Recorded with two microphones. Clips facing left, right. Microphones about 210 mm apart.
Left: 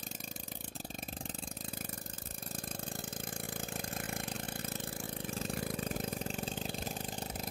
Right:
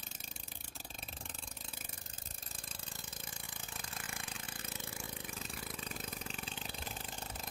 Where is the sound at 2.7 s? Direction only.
55° left (ahead or behind).